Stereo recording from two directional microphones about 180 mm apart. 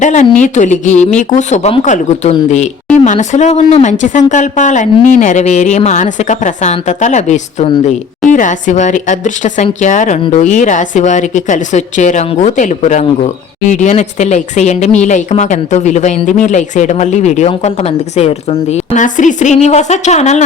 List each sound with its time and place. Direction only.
0.0 s speech: 40° left (ahead or behind)